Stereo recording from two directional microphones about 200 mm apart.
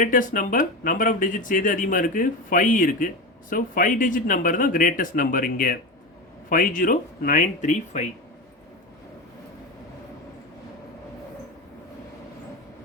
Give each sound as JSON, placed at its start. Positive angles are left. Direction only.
{"t": 0.0, "sound": "speech", "side_deg": 40}